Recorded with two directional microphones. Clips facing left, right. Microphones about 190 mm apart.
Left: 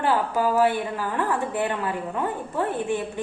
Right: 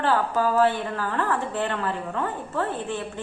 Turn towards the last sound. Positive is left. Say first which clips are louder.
# left 4 dB
turn(degrees=15)  # may be behind; listen again after turning